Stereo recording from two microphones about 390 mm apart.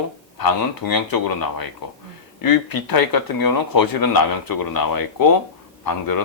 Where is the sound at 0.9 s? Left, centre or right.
Left.